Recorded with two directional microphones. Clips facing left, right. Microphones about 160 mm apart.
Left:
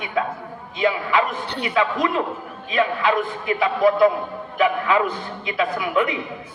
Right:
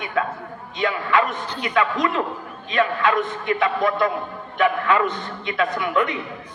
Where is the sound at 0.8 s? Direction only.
5° left (ahead or behind).